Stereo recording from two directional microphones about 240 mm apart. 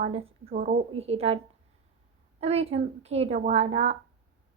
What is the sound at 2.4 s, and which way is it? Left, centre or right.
A woman's voice, right.